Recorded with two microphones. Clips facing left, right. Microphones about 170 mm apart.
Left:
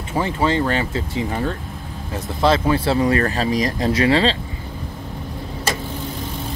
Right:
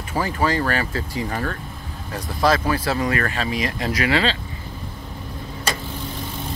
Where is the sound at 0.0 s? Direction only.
25° left (ahead or behind).